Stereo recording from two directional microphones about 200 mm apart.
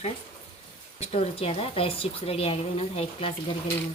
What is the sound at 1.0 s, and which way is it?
A woman's voice, 30° left (ahead or behind).